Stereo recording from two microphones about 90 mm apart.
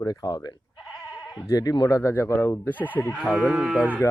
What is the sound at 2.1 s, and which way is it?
Speech, 25° left (ahead or behind).